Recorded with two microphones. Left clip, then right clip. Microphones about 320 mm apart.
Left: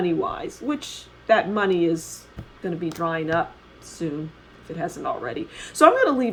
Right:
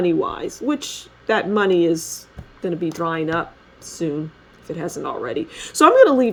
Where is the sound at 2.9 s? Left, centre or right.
Right.